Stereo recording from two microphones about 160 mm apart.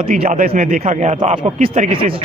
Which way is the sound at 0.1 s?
55° right (ahead or behind).